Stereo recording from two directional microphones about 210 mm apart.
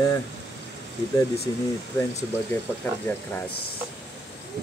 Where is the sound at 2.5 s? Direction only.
10° left (ahead or behind).